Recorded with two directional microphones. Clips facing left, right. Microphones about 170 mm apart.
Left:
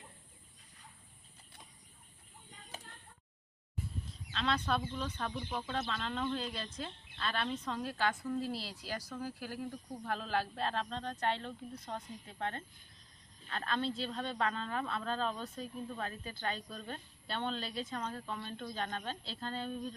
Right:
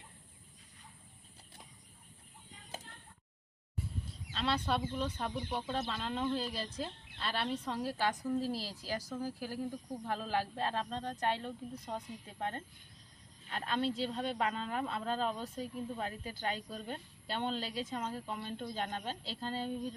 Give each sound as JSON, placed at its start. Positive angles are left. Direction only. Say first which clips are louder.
{"t": 4.3, "sound": "speech", "louder": "even", "side_deg": -5}